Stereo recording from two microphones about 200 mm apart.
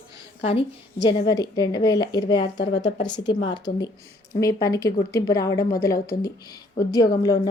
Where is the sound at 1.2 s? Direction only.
15° left (ahead or behind).